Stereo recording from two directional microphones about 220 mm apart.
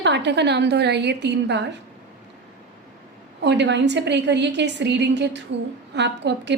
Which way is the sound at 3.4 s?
50° right (ahead or behind).